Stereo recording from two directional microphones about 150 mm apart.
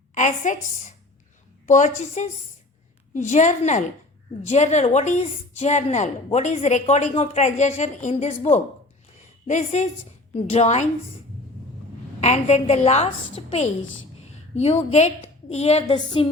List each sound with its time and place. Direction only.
0.1 s a woman's voice: 55° left (ahead or behind)
9.5 s speech: 50° left (ahead or behind)
12.2 s speech: 45° left (ahead or behind)